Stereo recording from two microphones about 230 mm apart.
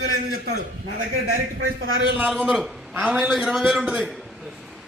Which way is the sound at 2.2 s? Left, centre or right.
Centre.